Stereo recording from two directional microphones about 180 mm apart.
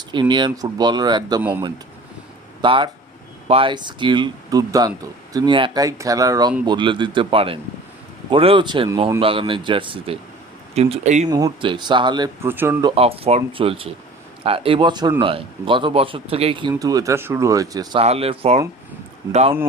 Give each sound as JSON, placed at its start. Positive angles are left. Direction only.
{"t": 0.1, "sound": "speech", "side_deg": -25}
{"t": 1.4, "sound": "speech", "side_deg": -10}
{"t": 2.6, "sound": "speech", "side_deg": -25}
{"t": 11.3, "sound": "speech", "side_deg": -20}
{"t": 12.5, "sound": "speech", "side_deg": -10}
{"t": 12.8, "sound": "speech", "side_deg": -30}
{"t": 18.0, "sound": "speech", "side_deg": -35}